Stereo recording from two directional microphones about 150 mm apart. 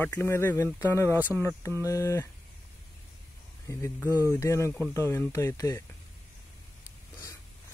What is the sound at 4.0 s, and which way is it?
Speech, 15° right (ahead or behind).